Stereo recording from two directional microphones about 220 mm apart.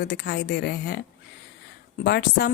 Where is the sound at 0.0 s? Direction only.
45° left (ahead or behind).